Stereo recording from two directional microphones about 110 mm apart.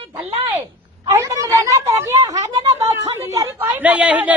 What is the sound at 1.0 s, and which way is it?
A woman's voice, 30° right (ahead or behind).